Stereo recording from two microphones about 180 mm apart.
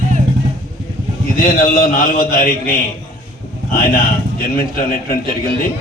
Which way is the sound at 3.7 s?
50° left (ahead or behind).